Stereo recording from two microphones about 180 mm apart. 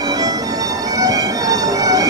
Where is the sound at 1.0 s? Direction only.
20° right (ahead or behind).